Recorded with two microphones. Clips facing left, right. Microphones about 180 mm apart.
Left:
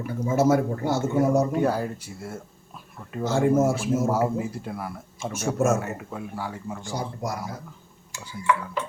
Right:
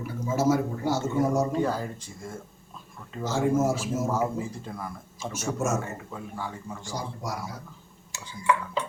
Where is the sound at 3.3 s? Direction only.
55° left (ahead or behind).